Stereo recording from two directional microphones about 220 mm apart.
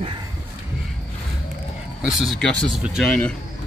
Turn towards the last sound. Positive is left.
turn(degrees=0)  # may be behind; listen again after turning